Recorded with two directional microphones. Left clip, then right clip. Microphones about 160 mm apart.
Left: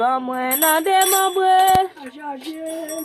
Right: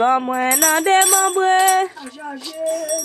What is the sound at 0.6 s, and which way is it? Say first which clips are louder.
Jingle bell: even; 20° right (ahead or behind).